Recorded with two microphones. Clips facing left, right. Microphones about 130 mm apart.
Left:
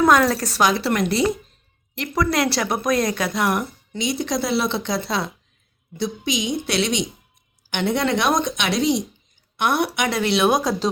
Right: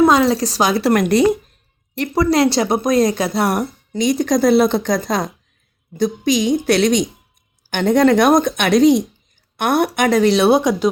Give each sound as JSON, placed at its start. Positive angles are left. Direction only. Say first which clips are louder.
{"t": 0.1, "sound": "speech", "louder": "right 3 dB", "side_deg": -15}
{"t": 0.5, "sound": "a woman's voice", "louder": "right 4 dB", "side_deg": -35}
{"t": 2.0, "sound": "a woman's voice", "louder": "right 6 dB", "side_deg": -30}
{"t": 10.6, "sound": "speech", "louder": "right 5 dB", "side_deg": -15}